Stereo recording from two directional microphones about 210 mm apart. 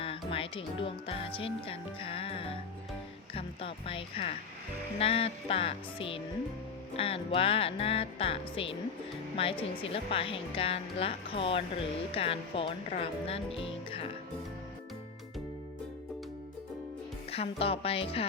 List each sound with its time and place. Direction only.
0.0 s speech: 25° left (ahead or behind)
17.3 s speech: 25° left (ahead or behind)